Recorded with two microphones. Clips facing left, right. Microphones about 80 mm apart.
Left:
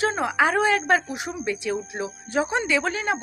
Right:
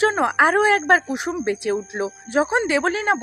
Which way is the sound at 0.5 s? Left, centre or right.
Right.